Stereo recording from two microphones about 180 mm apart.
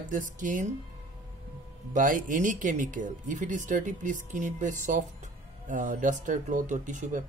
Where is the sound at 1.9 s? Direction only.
45° right (ahead or behind).